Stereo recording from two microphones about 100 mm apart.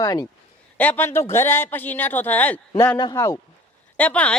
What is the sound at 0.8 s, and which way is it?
A man's voice, 20° left (ahead or behind).